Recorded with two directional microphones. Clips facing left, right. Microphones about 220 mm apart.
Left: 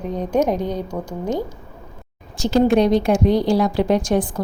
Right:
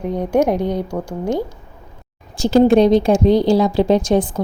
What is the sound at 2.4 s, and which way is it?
A woman's voice, 30° right (ahead or behind).